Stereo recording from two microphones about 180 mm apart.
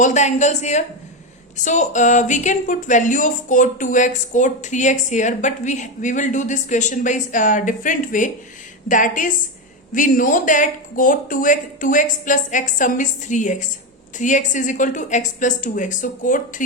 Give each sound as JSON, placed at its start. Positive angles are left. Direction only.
{"t": 0.0, "sound": "speech", "side_deg": 40}